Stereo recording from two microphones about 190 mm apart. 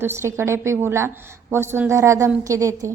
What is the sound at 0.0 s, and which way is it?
A woman's voice, 15° right (ahead or behind).